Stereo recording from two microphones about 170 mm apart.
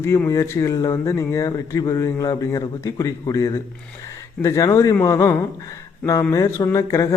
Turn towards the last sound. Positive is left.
turn(degrees=20)  # may be behind; listen again after turning